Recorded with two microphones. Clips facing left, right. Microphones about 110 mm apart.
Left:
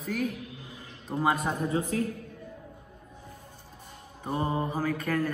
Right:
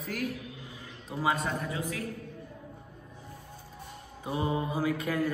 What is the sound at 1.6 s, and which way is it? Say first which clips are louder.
Speech: left 6 dB; 40° left (ahead or behind).